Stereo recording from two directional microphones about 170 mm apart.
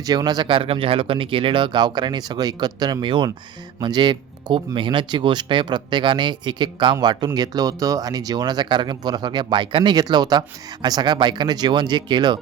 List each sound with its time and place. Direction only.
0.0 s speech: 20° right (ahead or behind)